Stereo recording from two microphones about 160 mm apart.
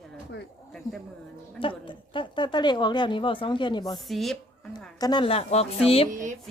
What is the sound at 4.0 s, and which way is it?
Speech, centre (ahead or behind).